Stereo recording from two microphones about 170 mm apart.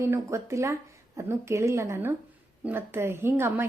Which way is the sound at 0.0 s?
15° right (ahead or behind).